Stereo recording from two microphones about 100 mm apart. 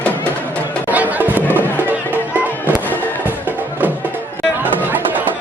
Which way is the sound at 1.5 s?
20° left (ahead or behind).